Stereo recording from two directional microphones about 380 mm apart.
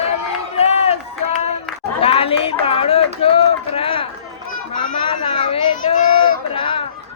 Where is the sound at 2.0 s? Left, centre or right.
Centre.